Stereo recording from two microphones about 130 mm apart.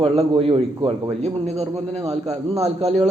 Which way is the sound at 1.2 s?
55° right (ahead or behind).